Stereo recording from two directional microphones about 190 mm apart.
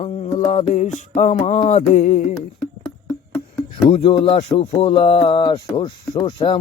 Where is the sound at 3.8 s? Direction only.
30° left (ahead or behind).